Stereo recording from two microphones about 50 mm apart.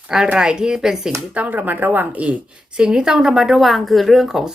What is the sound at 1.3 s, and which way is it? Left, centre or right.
Speech, right.